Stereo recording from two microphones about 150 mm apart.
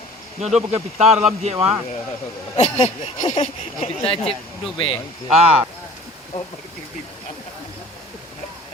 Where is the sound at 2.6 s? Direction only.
50° left (ahead or behind).